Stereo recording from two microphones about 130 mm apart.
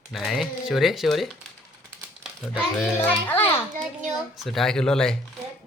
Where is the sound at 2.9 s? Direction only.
15° left (ahead or behind).